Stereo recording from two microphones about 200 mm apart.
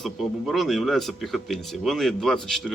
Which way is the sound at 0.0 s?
Centre (ahead or behind).